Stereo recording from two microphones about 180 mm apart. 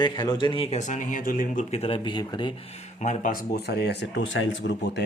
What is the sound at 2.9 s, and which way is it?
Speech, 40° left (ahead or behind).